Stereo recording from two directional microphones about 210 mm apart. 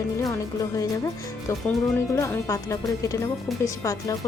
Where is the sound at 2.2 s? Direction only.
15° left (ahead or behind).